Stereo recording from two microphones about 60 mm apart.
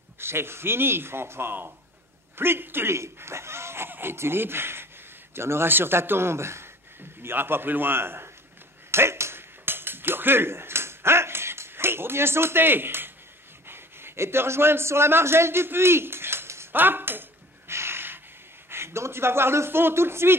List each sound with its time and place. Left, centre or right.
0.2 s speech: right
8.9 s ping: right
13.7 s a man's voice: right
16.7 s a sound: right
18.7 s speech: right